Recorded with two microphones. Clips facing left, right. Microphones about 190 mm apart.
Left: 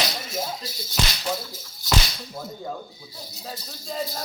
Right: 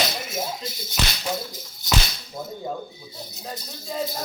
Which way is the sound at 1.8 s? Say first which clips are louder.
Left 1 dB; 20° right (ahead or behind).